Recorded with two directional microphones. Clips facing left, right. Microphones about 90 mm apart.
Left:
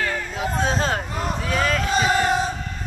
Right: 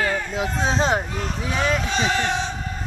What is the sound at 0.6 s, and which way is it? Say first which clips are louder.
Speech: right 2 dB; 25° right (ahead or behind).